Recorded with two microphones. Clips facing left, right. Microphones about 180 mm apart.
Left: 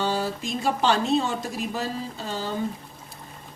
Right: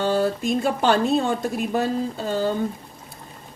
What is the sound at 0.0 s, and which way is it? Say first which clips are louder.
Speech: right 5 dB; 55° right (ahead or behind).